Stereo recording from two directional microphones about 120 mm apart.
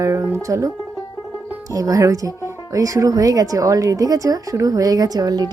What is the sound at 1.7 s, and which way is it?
Speech, 30° right (ahead or behind).